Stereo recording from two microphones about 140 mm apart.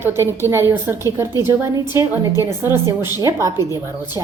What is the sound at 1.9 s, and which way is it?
A woman's voice, 20° right (ahead or behind).